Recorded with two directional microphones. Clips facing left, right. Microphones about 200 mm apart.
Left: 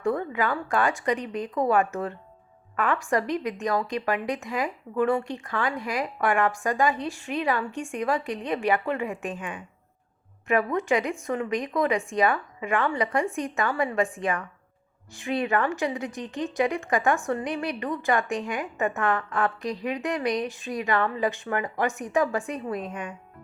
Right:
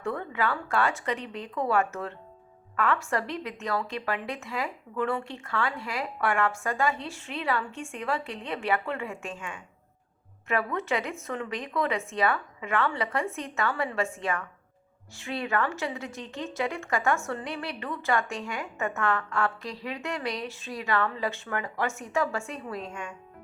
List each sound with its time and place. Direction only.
0.2 s a woman's voice: 15° left (ahead or behind)